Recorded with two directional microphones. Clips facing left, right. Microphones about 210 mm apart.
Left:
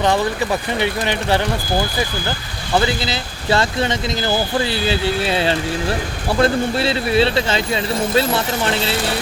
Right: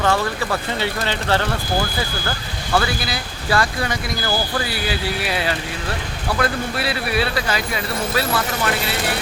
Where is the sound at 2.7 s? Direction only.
20° left (ahead or behind).